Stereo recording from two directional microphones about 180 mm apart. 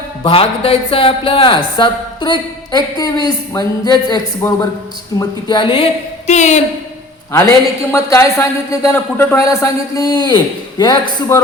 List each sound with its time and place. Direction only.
0.2 s speech: 30° left (ahead or behind)
7.9 s speech: 15° left (ahead or behind)